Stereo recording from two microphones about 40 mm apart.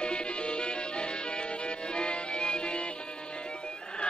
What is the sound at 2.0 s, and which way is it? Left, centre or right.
Music, left.